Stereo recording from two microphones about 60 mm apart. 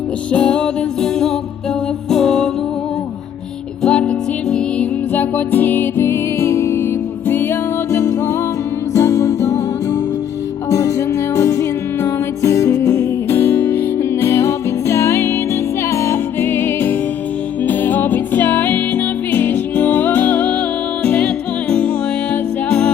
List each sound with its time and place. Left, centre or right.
0.3 s music: centre
3.8 s music: centre
5.1 s music: left
7.9 s music: left
12.9 s music: left